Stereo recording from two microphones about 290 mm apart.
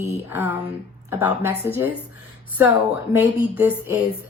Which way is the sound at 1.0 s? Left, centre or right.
Centre.